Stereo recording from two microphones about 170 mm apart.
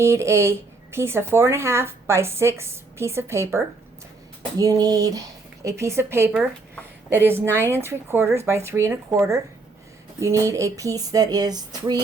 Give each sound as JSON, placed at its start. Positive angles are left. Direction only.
{"t": 0.0, "sound": "a woman's voice", "side_deg": -15}